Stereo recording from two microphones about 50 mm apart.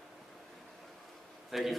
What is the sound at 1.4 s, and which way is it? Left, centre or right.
Speech, centre.